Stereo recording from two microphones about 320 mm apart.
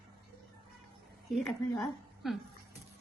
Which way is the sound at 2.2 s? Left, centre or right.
Centre.